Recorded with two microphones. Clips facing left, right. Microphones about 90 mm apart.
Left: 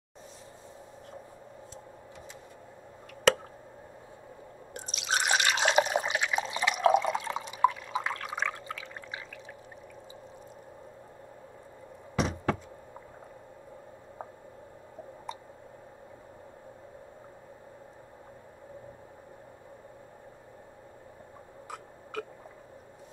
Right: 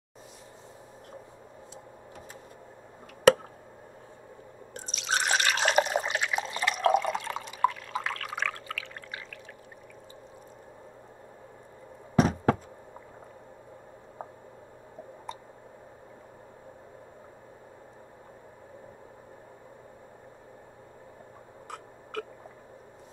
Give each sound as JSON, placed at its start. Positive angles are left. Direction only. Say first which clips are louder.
{"t": 5.1, "sound": "drip", "louder": "even", "side_deg": 10}
{"t": 12.2, "sound": "knock", "louder": "right 6 dB", "side_deg": -45}
{"t": 22.1, "sound": "a sound", "louder": "right 1 dB", "side_deg": 0}